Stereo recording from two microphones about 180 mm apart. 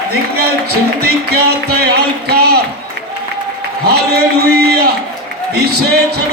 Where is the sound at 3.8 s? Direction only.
65° right (ahead or behind).